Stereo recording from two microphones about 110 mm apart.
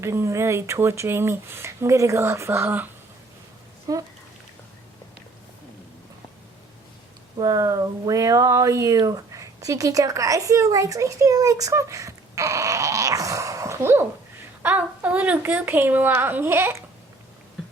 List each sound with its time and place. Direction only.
0.0 s speech: 25° right (ahead or behind)
3.9 s speech: 35° right (ahead or behind)
7.3 s speech: 30° right (ahead or behind)
14.6 s speech: 15° right (ahead or behind)